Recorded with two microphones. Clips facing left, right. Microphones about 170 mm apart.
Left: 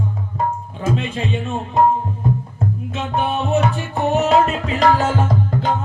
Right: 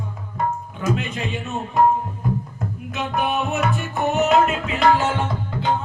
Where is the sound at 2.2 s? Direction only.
25° left (ahead or behind).